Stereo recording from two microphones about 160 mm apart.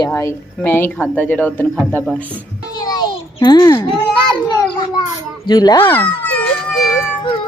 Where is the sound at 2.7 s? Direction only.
25° left (ahead or behind).